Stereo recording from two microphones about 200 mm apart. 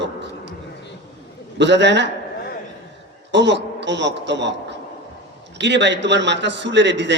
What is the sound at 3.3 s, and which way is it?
A man's voice, 60° right (ahead or behind).